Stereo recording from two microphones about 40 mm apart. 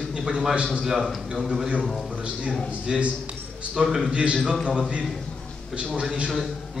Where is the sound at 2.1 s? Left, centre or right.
Right.